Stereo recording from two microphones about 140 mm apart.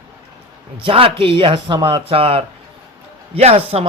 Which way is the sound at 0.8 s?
40° right (ahead or behind).